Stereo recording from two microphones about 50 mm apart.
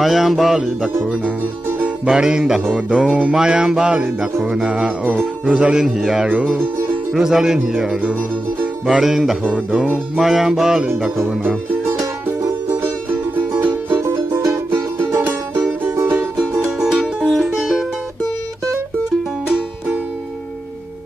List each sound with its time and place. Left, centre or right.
0.0 s music: centre
2.0 s music: centre
4.2 s speech: centre
5.0 s speech: right
5.5 s music: centre
7.2 s music: centre
11.8 s music: right
15.1 s music: right
16.3 s music: right
16.8 s music: centre